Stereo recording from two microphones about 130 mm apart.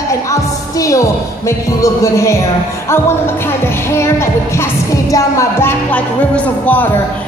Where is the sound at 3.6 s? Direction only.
20° left (ahead or behind).